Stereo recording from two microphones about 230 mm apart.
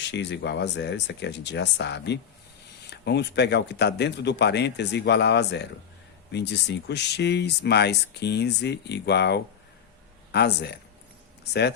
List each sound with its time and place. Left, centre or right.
0.0 s speech: left